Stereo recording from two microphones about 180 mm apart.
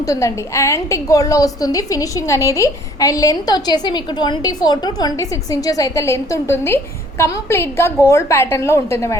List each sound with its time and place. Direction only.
0.0 s a woman's voice: 20° left (ahead or behind)